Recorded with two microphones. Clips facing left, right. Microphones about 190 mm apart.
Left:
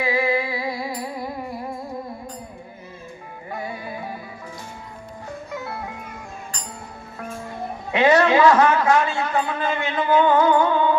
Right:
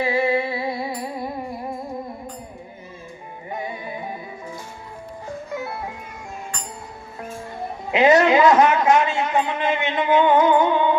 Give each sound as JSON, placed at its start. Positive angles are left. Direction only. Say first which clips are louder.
{"t": 0.0, "sound": "music", "louder": "right 1 dB", "side_deg": -30}
{"t": 3.5, "sound": "music", "louder": "right 1 dB", "side_deg": -20}
{"t": 7.9, "sound": "a man's voice", "louder": "right 2 dB", "side_deg": -20}